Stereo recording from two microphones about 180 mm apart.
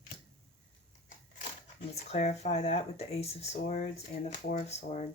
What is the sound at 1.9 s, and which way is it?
Speech, 40° left (ahead or behind).